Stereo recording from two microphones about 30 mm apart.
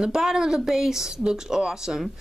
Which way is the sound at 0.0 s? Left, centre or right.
Centre.